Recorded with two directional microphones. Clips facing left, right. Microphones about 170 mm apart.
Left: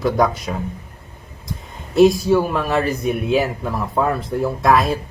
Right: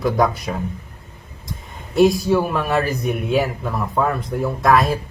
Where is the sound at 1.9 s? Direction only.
Centre (ahead or behind).